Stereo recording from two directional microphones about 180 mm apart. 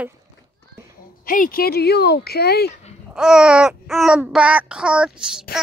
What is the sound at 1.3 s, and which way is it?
Speech, 50° left (ahead or behind).